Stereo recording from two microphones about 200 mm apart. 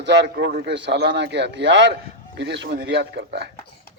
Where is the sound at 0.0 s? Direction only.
60° right (ahead or behind).